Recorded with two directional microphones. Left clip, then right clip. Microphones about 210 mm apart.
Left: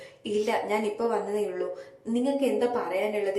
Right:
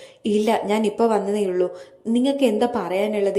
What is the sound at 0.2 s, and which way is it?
A woman's voice, 30° right (ahead or behind).